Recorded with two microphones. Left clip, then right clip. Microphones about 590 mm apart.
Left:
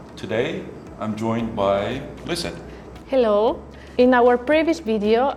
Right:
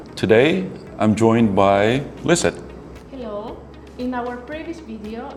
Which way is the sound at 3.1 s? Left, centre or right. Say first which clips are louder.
Left 13 dB; left.